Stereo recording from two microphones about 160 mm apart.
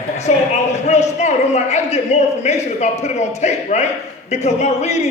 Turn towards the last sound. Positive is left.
turn(degrees=45)  # may be behind; listen again after turning